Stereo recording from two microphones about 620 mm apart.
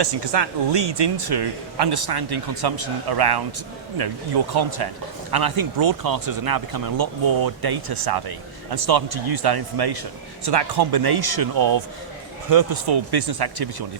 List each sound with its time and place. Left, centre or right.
0.0 s speech: right